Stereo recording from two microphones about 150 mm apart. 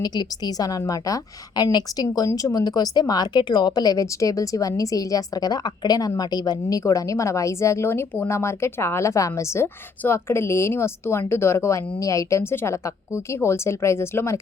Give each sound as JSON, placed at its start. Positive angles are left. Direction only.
{"t": 0.0, "sound": "a woman's voice", "side_deg": 25}